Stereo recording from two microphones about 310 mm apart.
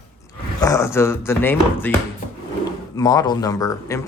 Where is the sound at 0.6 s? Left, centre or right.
Centre.